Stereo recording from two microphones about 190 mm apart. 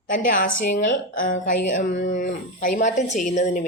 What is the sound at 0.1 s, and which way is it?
A woman's voice, 45° left (ahead or behind).